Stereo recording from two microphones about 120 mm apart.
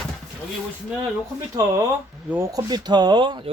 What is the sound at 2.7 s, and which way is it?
Speech, 35° right (ahead or behind).